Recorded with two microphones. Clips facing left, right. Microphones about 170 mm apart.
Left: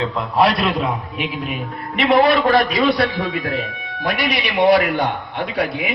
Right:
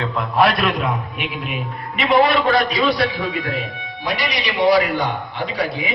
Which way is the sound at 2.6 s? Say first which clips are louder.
Left 2 dB; 45° left (ahead or behind).